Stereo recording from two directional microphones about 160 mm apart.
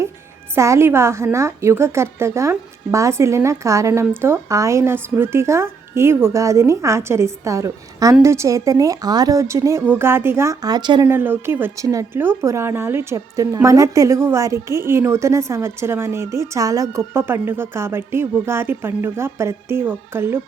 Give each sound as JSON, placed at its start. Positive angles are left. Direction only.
{"t": 0.5, "sound": "a woman's voice", "side_deg": -15}
{"t": 11.1, "sound": "a woman's voice", "side_deg": -15}